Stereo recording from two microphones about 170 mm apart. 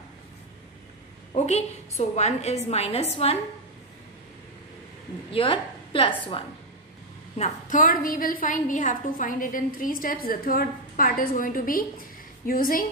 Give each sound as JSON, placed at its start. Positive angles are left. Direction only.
{"t": 1.3, "sound": "a woman's voice", "side_deg": 40}
{"t": 5.3, "sound": "a woman's voice", "side_deg": 30}
{"t": 7.3, "sound": "a woman's voice", "side_deg": 45}